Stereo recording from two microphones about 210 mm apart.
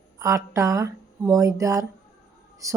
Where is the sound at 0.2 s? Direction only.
15° right (ahead or behind).